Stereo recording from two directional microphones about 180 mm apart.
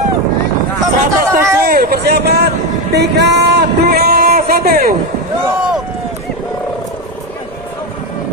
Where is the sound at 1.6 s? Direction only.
50° right (ahead or behind).